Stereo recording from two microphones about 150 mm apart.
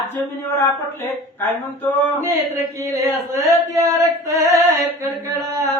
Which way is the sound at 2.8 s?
20° right (ahead or behind).